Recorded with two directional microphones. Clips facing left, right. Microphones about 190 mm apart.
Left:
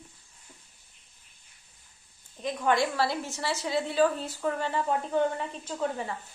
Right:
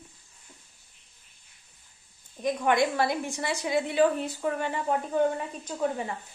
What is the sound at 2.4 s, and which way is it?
A woman's voice, 15° right (ahead or behind).